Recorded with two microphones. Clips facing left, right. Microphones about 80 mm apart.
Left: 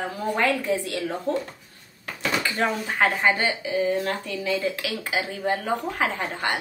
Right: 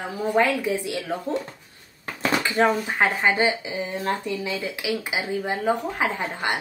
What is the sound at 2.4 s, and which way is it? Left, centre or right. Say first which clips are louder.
Speech: right 7 dB; right.